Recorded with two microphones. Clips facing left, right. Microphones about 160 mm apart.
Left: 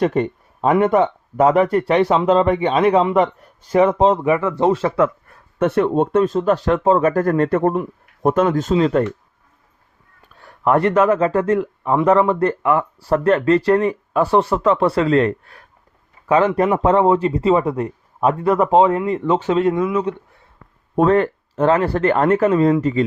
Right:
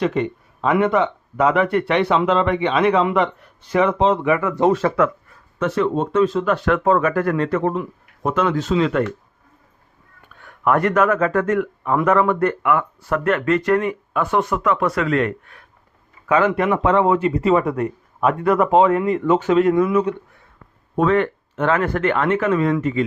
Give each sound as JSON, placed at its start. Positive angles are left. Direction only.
{"t": 0.0, "sound": "speech", "side_deg": 45}
{"t": 5.3, "sound": "speech", "side_deg": 55}
{"t": 7.1, "sound": "speech", "side_deg": 40}
{"t": 10.2, "sound": "speech", "side_deg": 35}
{"t": 16.7, "sound": "a man's voice", "side_deg": 40}
{"t": 20.9, "sound": "speech", "side_deg": 40}